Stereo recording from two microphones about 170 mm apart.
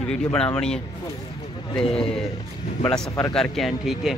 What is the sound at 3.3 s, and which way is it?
Speech, centre (ahead or behind).